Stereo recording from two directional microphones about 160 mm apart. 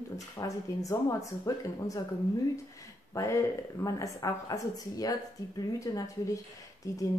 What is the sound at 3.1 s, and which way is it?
Speech, 20° left (ahead or behind).